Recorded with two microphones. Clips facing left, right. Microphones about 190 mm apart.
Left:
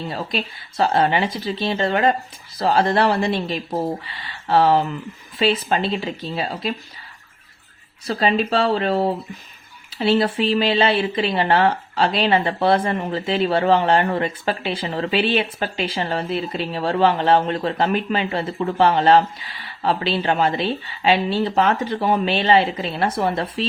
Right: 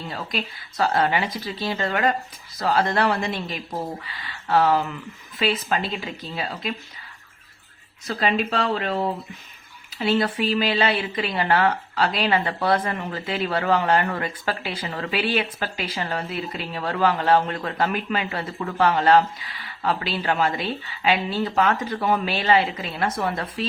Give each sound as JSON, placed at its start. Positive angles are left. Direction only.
{"t": 0.1, "sound": "speech", "side_deg": 30}
{"t": 8.0, "sound": "speech", "side_deg": 30}